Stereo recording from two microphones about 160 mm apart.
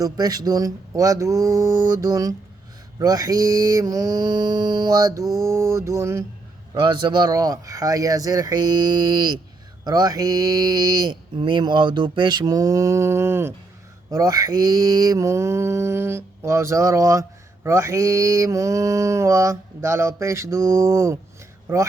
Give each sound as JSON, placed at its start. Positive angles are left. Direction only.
{"t": 0.0, "sound": "mantra", "side_deg": -25}
{"t": 6.7, "sound": "mantra", "side_deg": -30}